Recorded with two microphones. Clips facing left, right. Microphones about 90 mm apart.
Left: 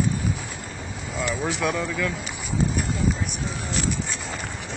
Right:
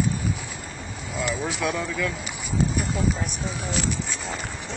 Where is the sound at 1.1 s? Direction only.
Centre (ahead or behind).